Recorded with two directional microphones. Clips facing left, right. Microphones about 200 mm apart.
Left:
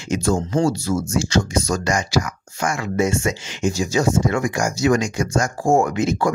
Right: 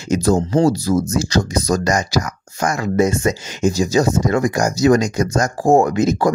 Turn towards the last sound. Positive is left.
turn(degrees=-40)  # may be behind; listen again after turning